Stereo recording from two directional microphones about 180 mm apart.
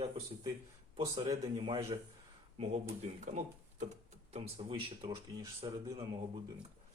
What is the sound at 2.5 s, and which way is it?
Speech, 35° right (ahead or behind).